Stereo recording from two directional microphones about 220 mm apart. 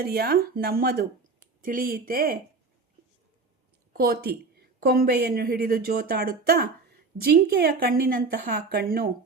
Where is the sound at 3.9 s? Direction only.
45° right (ahead or behind).